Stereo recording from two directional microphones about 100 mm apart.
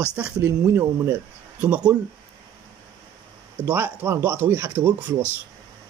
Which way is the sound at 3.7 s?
20° right (ahead or behind).